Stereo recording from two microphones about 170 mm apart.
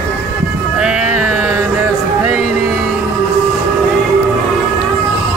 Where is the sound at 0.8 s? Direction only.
5° right (ahead or behind).